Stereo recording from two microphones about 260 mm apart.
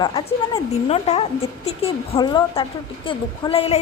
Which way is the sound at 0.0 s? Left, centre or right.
Centre.